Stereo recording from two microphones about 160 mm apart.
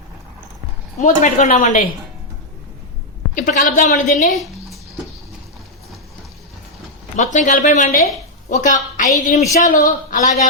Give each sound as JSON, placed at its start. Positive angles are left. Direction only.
{"t": 1.0, "sound": "a woman's voice", "side_deg": 50}
{"t": 3.3, "sound": "a woman's voice", "side_deg": 55}
{"t": 4.3, "sound": "a sound", "side_deg": 0}
{"t": 7.2, "sound": "a woman's voice", "side_deg": 50}
{"t": 9.4, "sound": "a woman's voice", "side_deg": 20}
{"t": 9.6, "sound": "a woman's voice", "side_deg": 55}